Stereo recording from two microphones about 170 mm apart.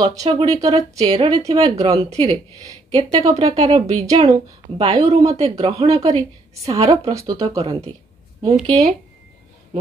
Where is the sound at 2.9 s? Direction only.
35° right (ahead or behind).